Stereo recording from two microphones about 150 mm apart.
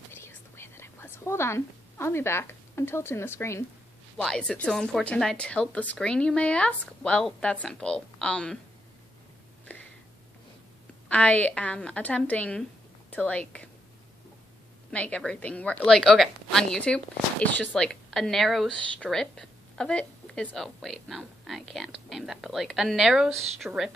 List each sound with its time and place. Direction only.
0.1 s whispering: 15° left (ahead or behind)
4.2 s speech: 5° left (ahead or behind)
11.1 s speech: 10° left (ahead or behind)
14.9 s a woman's voice: 10° left (ahead or behind)